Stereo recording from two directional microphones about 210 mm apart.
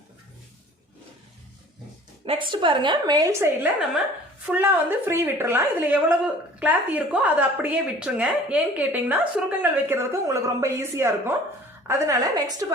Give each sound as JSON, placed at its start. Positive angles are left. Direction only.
{"t": 2.2, "sound": "a woman's voice", "side_deg": -25}